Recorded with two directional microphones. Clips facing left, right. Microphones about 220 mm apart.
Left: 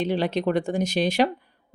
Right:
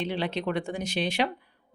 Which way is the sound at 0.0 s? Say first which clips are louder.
Left 6 dB; 40° left (ahead or behind).